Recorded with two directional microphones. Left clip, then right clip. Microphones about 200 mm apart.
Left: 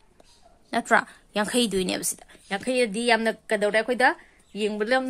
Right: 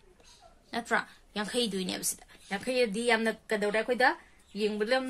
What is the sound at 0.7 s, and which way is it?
A woman's voice, 50° left (ahead or behind).